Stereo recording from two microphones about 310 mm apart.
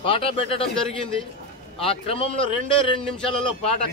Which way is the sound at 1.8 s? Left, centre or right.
Centre.